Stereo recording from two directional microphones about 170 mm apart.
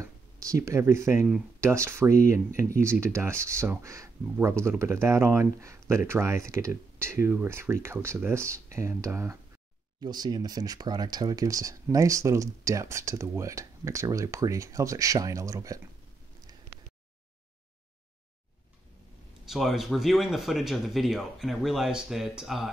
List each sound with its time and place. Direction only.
0.0 s speech: 20° right (ahead or behind)
19.4 s speech: centre (ahead or behind)